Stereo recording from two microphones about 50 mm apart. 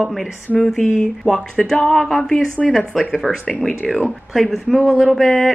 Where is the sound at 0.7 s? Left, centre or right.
Centre.